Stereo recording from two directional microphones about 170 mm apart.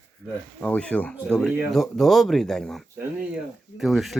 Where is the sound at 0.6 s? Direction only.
10° left (ahead or behind).